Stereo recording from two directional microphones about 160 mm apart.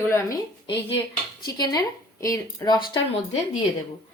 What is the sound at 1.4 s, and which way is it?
A woman's voice, 25° left (ahead or behind).